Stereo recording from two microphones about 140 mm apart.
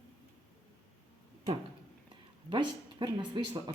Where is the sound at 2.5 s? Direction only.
35° right (ahead or behind).